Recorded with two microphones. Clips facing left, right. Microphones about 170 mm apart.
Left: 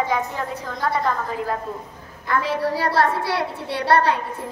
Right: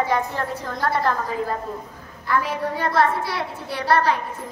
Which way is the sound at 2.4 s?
35° left (ahead or behind).